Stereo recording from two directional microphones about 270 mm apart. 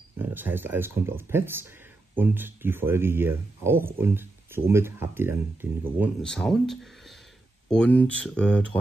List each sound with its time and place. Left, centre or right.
0.2 s speech: centre